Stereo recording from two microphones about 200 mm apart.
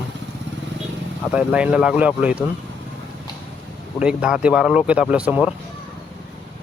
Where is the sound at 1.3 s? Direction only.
5° right (ahead or behind).